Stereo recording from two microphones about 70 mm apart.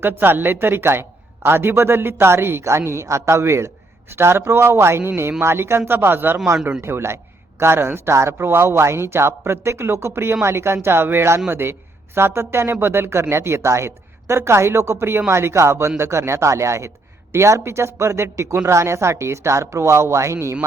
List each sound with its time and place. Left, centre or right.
0.0 s a woman's voice: right